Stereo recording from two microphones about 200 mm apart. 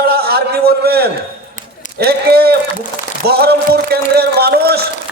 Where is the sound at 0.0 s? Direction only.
50° right (ahead or behind).